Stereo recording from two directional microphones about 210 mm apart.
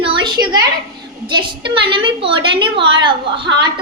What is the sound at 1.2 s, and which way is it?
A woman's voice, 20° right (ahead or behind).